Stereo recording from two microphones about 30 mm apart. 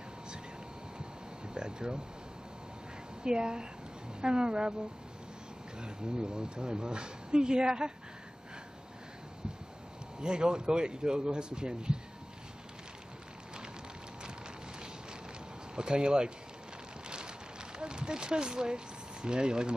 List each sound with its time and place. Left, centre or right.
0.9 s air conditioning: right
3.3 s speech: right
5.8 s speech: right
10.2 s speech: right
15.7 s speech: right
17.7 s speech: right